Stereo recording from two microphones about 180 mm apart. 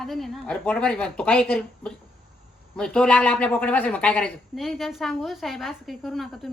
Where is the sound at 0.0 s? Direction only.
Centre (ahead or behind).